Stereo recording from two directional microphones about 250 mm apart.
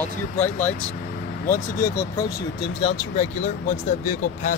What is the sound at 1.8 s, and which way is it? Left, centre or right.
Speech, centre.